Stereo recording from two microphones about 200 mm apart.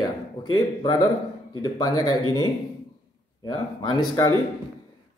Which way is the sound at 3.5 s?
20° left (ahead or behind).